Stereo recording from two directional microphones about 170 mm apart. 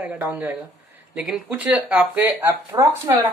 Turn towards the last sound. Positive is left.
turn(degrees=-15)  # may be behind; listen again after turning